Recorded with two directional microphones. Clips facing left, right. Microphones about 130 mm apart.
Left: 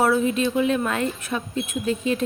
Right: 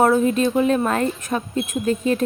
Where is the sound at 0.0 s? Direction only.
45° right (ahead or behind).